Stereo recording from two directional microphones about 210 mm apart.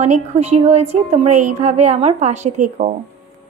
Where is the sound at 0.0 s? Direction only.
30° right (ahead or behind).